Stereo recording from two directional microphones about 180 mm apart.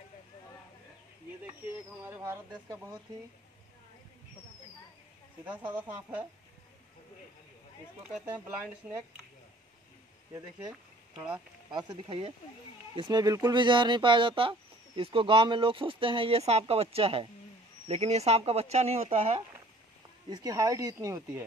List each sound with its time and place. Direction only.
2.0 s speech: 15° right (ahead or behind)
5.4 s speech: 10° right (ahead or behind)
8.0 s speech: 10° right (ahead or behind)
11.7 s speech: 25° right (ahead or behind)
20.2 s speech: 20° right (ahead or behind)